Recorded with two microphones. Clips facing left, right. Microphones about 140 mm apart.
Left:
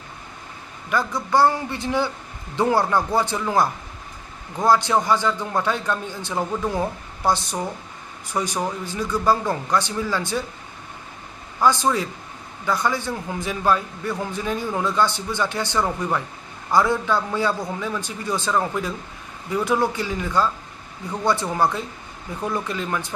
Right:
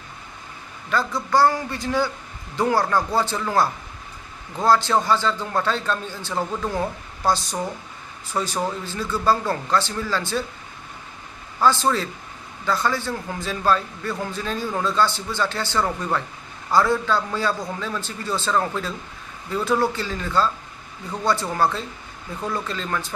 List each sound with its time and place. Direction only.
1.3 s a man's voice: 20° left (ahead or behind)
11.6 s a man's voice: 15° left (ahead or behind)